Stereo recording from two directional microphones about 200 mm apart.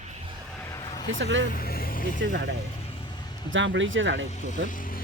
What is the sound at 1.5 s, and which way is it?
Vehicle, 50° left (ahead or behind).